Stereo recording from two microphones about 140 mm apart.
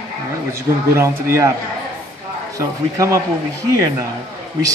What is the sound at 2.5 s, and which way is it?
Speech, 25° right (ahead or behind).